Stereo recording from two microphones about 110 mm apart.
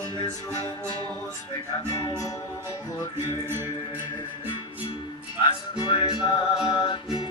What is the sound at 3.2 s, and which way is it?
Music, 20° right (ahead or behind).